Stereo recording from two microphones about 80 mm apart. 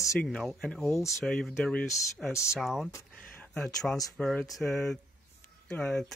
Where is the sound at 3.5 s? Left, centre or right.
Centre.